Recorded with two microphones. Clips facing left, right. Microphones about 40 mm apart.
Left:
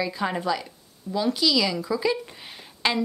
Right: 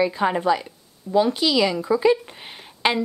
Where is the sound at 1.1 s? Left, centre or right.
Right.